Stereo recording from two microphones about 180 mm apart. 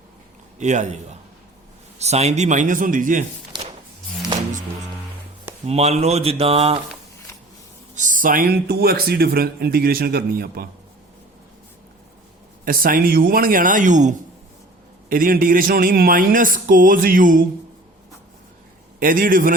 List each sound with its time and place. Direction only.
0.6 s speech: 40° right (ahead or behind)
2.0 s speech: 35° right (ahead or behind)
5.6 s speech: 35° right (ahead or behind)
7.9 s speech: 45° right (ahead or behind)
12.6 s speech: 50° right (ahead or behind)
18.9 s speech: 50° right (ahead or behind)